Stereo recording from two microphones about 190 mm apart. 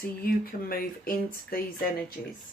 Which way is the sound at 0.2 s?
50° left (ahead or behind).